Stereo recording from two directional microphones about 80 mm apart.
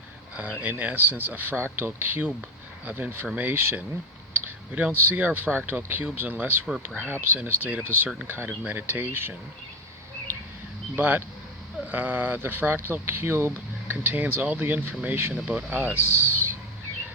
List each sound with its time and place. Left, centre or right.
0.3 s speech: centre
10.9 s speech: right